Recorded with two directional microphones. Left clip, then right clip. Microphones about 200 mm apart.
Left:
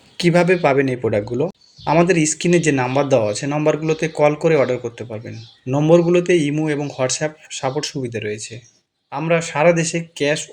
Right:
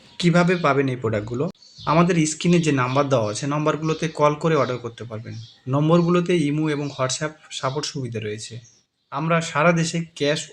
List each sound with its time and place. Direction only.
0.2 s speech: 5° left (ahead or behind)